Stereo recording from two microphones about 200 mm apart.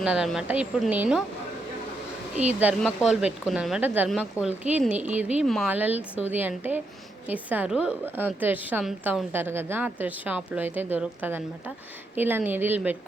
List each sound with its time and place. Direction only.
0.0 s speech: 5° right (ahead or behind)
2.5 s a woman's voice: 5° right (ahead or behind)